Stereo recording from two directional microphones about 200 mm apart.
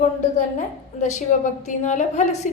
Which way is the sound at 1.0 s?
35° left (ahead or behind).